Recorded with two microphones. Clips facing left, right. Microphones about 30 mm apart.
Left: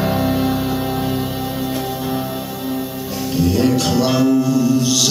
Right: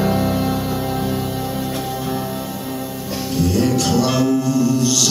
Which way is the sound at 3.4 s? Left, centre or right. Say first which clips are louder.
Left 2 dB; centre.